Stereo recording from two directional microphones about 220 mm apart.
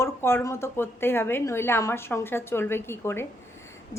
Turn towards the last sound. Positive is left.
turn(degrees=10)  # may be behind; listen again after turning